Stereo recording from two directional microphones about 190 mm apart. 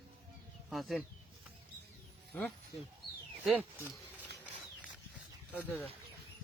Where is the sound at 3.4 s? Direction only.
5° right (ahead or behind).